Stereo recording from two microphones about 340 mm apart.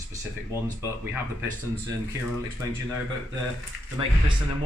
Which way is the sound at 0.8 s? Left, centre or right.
Centre.